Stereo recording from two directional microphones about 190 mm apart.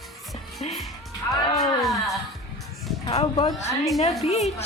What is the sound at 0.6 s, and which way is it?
Speech, 35° left (ahead or behind).